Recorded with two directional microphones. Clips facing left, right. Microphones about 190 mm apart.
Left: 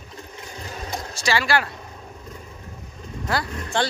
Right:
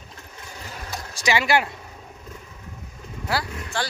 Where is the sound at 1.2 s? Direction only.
20° right (ahead or behind).